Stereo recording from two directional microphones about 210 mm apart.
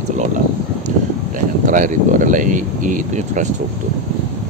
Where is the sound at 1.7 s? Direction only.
40° right (ahead or behind).